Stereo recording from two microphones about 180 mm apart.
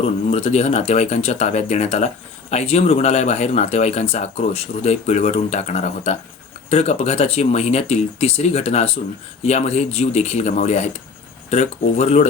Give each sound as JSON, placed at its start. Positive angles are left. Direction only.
{"t": 0.3, "sound": "speech", "side_deg": 35}